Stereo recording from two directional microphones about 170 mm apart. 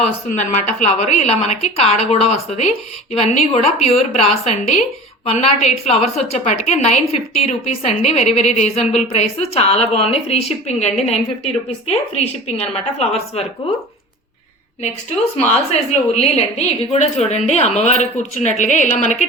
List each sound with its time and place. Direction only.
0.0 s a woman's voice: 40° left (ahead or behind)
15.7 s a woman's voice: 40° left (ahead or behind)